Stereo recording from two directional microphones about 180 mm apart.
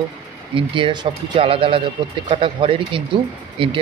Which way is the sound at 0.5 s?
30° right (ahead or behind).